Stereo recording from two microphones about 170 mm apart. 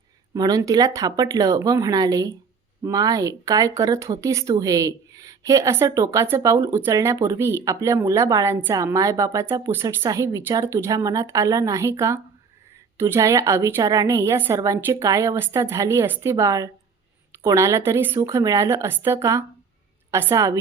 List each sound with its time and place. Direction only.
0.3 s a woman's voice: 20° right (ahead or behind)